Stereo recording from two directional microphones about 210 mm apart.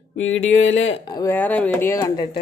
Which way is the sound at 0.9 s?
20° left (ahead or behind).